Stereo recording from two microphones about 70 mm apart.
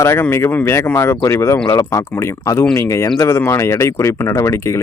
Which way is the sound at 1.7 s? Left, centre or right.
Left.